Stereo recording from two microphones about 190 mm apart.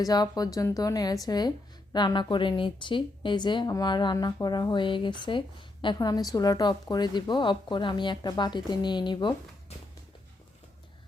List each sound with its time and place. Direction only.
0.0 s speech: 20° left (ahead or behind)